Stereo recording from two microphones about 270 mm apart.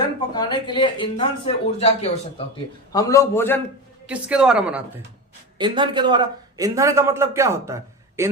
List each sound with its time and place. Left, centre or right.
0.3 s speech: centre
2.9 s speech: centre
4.0 s a woman's voice: centre
5.5 s a man's voice: centre